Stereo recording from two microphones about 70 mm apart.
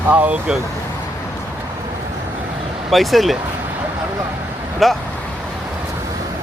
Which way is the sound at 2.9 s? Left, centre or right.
Centre.